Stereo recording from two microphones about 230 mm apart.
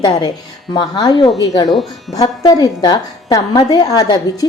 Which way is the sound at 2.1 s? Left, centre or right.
Centre.